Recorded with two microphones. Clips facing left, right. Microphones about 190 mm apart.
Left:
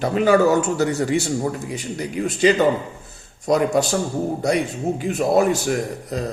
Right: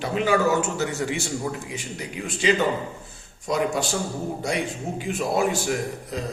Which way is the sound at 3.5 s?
40° left (ahead or behind).